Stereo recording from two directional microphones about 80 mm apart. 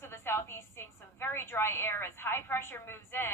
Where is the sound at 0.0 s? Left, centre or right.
Left.